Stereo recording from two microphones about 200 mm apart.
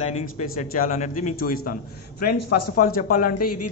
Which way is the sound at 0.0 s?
35° left (ahead or behind).